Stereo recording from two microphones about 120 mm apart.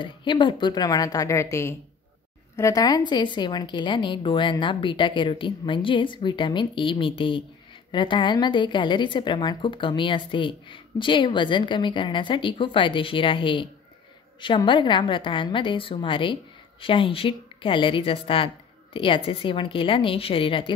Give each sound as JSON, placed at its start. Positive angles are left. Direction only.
{"t": 0.0, "sound": "a woman's voice", "side_deg": 40}